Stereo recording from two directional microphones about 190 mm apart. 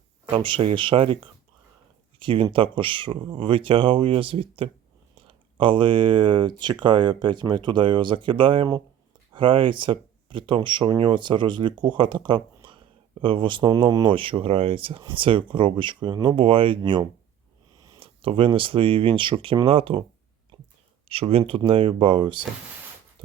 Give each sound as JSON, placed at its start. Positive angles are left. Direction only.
{"t": 0.3, "sound": "speech", "side_deg": -30}
{"t": 21.1, "sound": "speech", "side_deg": -30}